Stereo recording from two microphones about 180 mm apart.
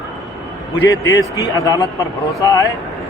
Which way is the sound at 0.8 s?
90° left.